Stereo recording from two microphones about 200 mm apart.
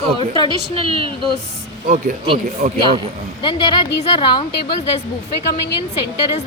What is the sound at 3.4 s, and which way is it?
A woman's voice, 25° left (ahead or behind).